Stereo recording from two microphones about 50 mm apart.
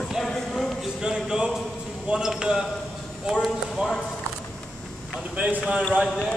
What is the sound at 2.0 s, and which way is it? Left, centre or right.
Speech, centre.